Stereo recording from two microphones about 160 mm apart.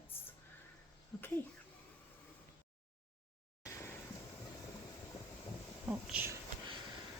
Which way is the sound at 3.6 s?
20° left (ahead or behind).